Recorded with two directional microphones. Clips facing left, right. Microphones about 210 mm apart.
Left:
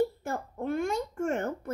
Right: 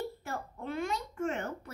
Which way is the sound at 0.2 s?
50° left (ahead or behind).